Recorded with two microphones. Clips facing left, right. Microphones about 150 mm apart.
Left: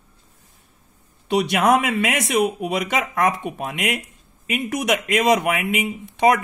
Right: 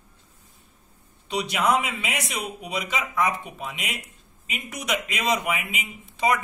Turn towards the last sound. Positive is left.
turn(degrees=65)  # may be behind; listen again after turning